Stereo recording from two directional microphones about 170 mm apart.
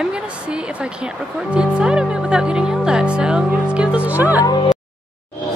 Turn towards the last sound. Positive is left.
turn(degrees=25)  # may be behind; listen again after turning